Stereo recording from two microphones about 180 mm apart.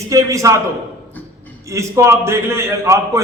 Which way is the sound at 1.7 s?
15° right (ahead or behind).